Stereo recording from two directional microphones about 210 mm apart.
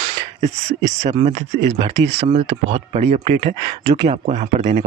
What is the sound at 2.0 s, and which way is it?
Speech, 30° right (ahead or behind).